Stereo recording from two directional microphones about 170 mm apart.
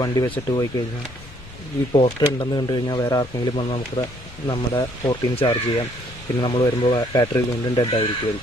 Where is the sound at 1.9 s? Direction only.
35° left (ahead or behind).